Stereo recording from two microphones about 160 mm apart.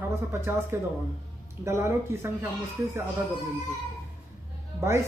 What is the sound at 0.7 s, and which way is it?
A woman's voice, 15° right (ahead or behind).